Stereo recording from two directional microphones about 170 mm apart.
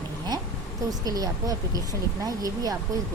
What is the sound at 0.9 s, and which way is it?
Speech, 20° right (ahead or behind).